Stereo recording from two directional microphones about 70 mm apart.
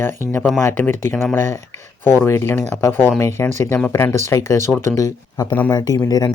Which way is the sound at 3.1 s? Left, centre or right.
Left.